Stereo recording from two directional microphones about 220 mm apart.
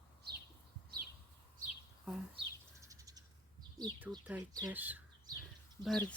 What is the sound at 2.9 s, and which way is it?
Crow, 15° right (ahead or behind).